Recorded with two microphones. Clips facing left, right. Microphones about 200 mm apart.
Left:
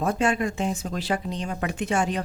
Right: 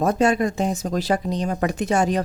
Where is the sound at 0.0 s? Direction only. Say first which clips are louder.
Right 5 dB; 40° right (ahead or behind).